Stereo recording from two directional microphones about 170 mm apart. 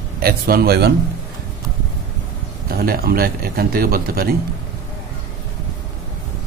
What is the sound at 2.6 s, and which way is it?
A man's voice, 60° right (ahead or behind).